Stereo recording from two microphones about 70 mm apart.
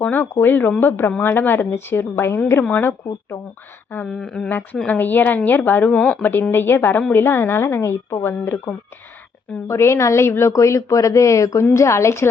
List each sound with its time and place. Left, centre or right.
0.0 s a woman's voice: left
4.1 s speech: centre
4.4 s a woman's voice: left
6.0 s speech: centre
6.5 s a woman's voice: left